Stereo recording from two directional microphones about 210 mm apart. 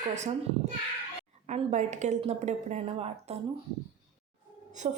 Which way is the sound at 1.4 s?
35° right (ahead or behind).